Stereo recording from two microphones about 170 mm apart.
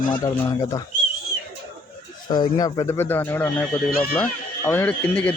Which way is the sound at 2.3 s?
25° left (ahead or behind).